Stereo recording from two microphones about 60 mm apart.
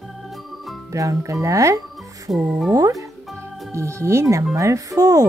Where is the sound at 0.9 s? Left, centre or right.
Right.